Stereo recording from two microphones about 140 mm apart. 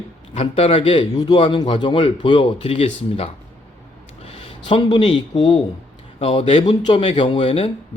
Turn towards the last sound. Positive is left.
turn(degrees=40)  # may be behind; listen again after turning